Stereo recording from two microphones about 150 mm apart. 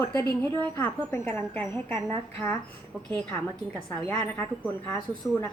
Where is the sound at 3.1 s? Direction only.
5° left (ahead or behind).